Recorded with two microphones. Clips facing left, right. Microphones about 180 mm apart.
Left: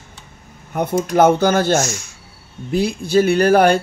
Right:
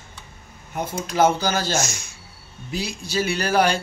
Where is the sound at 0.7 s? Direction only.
60° left (ahead or behind).